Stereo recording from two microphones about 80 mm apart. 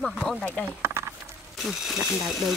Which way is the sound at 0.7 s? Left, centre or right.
Right.